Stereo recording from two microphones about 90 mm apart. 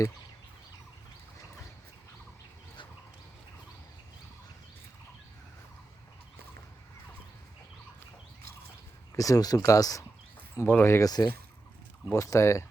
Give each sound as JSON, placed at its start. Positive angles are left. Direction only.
{"t": 9.1, "sound": "speech", "side_deg": 40}
{"t": 10.6, "sound": "speech", "side_deg": 25}
{"t": 11.0, "sound": "speech", "side_deg": 45}
{"t": 12.1, "sound": "speech", "side_deg": 35}